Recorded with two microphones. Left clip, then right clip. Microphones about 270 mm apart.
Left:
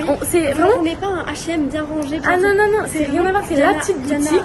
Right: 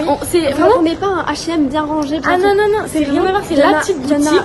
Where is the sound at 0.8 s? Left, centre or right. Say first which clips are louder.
Right 5 dB; right.